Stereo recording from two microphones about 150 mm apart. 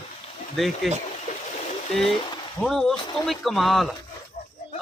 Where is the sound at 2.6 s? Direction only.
Centre (ahead or behind).